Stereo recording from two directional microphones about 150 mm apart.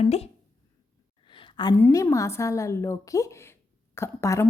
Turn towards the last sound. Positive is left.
turn(degrees=15)  # may be behind; listen again after turning